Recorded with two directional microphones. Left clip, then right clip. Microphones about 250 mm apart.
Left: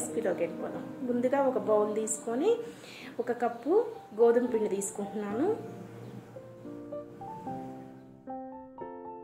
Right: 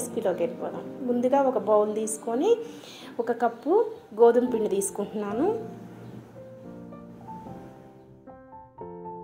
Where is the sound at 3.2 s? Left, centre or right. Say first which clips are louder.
Right 5 dB; centre.